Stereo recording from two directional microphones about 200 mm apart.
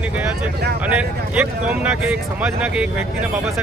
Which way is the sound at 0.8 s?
5° right (ahead or behind).